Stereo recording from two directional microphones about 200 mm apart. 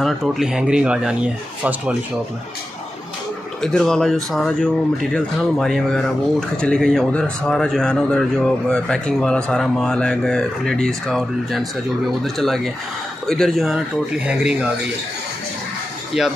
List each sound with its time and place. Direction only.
0.0 s speech: centre (ahead or behind)
3.6 s speech: 5° left (ahead or behind)
16.2 s speech: 5° right (ahead or behind)